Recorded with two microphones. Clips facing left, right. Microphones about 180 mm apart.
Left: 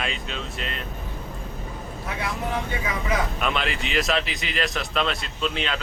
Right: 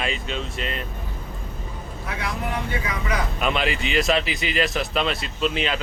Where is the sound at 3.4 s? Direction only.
Centre (ahead or behind).